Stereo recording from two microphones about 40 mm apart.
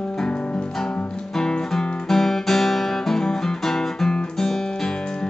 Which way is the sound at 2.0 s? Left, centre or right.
Centre.